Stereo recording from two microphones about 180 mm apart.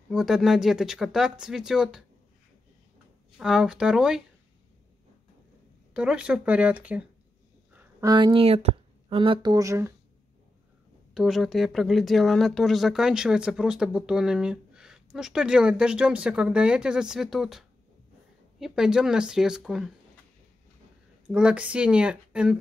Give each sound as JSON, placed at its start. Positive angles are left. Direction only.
{"t": 0.1, "sound": "speech", "side_deg": 0}
{"t": 3.3, "sound": "speech", "side_deg": -5}
{"t": 5.9, "sound": "speech", "side_deg": -5}
{"t": 7.7, "sound": "speech", "side_deg": -20}
{"t": 11.1, "sound": "speech", "side_deg": 0}
{"t": 21.3, "sound": "speech", "side_deg": -5}